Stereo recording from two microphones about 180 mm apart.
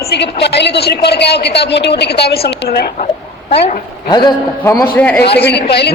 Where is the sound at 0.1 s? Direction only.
70° left (ahead or behind).